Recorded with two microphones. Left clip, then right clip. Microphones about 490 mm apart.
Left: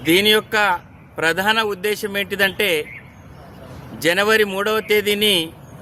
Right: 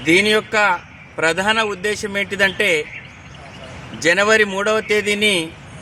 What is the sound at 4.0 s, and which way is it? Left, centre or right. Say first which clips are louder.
A man's voice: right 2 dB; left.